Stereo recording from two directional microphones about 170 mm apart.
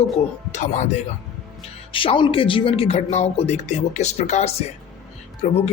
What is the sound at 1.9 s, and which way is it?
Speech, 30° left (ahead or behind).